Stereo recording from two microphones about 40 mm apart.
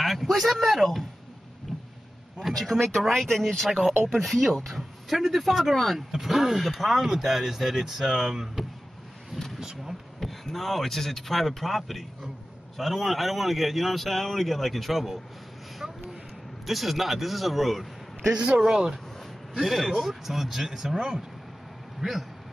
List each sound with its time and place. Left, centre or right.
0.0 s a man's voice: centre
1.7 s a sound: centre
2.4 s a man's voice: centre
10.2 s a man's voice: centre
15.8 s a sound: centre
16.6 s a man's voice: centre
18.7 s speech: centre
19.5 s speech: centre